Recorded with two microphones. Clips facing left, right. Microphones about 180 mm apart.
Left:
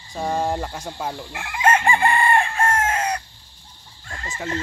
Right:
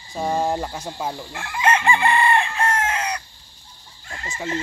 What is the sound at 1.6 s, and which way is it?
Chicken, 45° left (ahead or behind).